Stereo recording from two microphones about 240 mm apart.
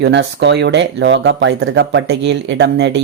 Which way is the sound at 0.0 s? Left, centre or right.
Right.